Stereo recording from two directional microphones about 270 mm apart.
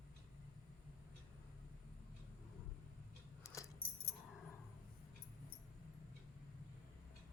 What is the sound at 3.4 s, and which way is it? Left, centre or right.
Keys jangling, centre.